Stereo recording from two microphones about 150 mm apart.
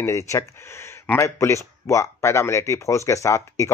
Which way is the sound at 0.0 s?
20° left (ahead or behind).